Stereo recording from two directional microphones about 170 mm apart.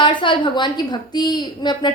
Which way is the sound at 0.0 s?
30° left (ahead or behind).